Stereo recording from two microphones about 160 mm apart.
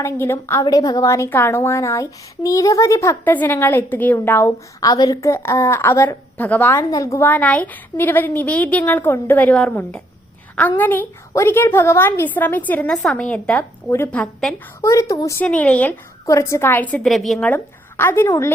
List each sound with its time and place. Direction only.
0.0 s a woman's voice: 15° left (ahead or behind)
14.8 s a woman's voice: 20° left (ahead or behind)
15.4 s a woman's voice: 10° left (ahead or behind)
16.2 s a woman's voice: 20° left (ahead or behind)